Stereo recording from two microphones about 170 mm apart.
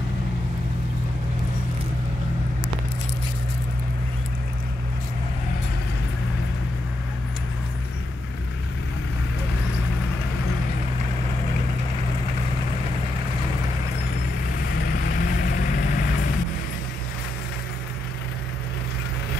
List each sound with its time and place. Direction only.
14.8 s vehicle: 65° left (ahead or behind)